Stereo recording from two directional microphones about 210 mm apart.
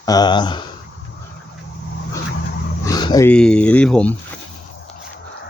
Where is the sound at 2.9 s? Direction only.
20° left (ahead or behind).